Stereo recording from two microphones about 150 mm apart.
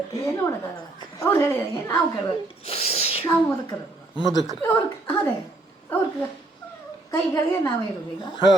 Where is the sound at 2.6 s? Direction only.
40° left (ahead or behind).